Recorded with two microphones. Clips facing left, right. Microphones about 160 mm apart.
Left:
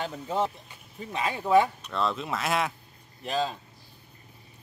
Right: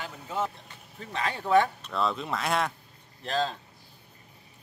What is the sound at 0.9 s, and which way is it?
Speech, 15° left (ahead or behind).